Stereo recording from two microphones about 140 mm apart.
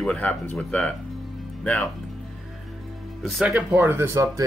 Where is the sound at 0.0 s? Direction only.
10° left (ahead or behind).